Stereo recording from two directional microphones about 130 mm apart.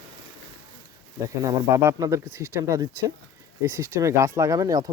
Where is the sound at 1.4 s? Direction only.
25° right (ahead or behind).